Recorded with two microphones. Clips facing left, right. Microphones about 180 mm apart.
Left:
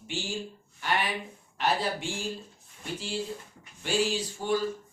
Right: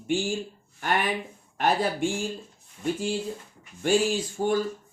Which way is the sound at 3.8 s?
50° right (ahead or behind).